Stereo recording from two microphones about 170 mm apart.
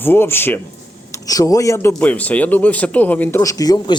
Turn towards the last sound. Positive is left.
turn(degrees=25)  # may be behind; listen again after turning